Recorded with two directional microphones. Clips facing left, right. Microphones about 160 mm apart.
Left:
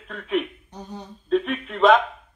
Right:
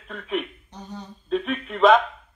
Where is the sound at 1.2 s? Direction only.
Centre (ahead or behind).